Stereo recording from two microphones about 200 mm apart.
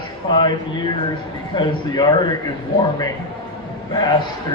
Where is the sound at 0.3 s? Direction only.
20° left (ahead or behind).